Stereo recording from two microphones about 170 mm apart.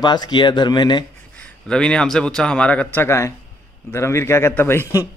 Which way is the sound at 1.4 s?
5° left (ahead or behind).